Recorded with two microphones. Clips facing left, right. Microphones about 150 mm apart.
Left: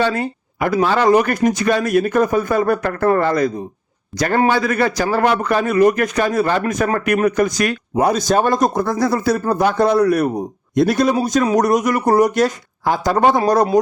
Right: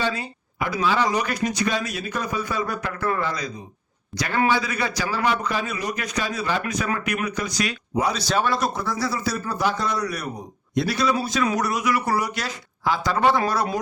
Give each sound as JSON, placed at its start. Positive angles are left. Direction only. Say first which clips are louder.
{"t": 0.0, "sound": "a man's voice", "louder": "left 8 dB", "side_deg": 55}